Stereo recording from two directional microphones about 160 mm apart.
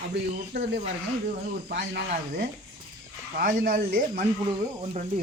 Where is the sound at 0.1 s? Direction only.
90° right.